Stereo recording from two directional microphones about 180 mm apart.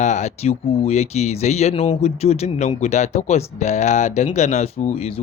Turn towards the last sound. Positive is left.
turn(degrees=35)  # may be behind; listen again after turning